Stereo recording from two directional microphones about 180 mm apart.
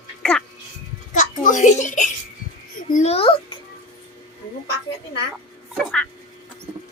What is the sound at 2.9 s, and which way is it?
Speech, 40° left (ahead or behind).